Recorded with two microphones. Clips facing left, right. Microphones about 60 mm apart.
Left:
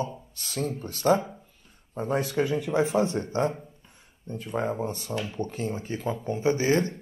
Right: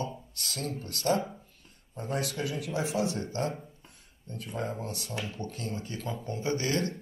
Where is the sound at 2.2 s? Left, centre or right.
Left.